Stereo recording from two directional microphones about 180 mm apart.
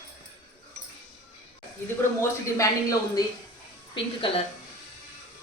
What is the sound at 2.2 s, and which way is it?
Speech, 15° left (ahead or behind).